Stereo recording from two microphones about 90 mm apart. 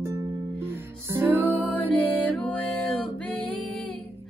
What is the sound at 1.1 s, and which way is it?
Music, 30° right (ahead or behind).